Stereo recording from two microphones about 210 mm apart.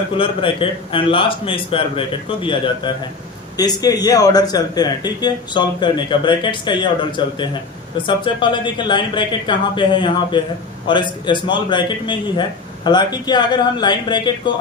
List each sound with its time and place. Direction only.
0.2 s speech: 25° left (ahead or behind)